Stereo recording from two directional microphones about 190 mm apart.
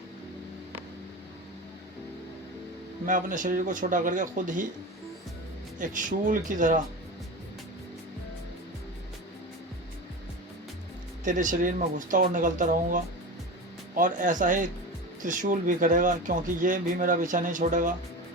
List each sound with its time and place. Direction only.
3.1 s speech: 45° right (ahead or behind)
5.8 s speech: 45° right (ahead or behind)
11.3 s speech: 45° right (ahead or behind)